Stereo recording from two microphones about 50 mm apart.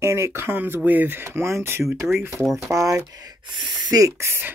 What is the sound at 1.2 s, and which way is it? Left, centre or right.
Speech, right.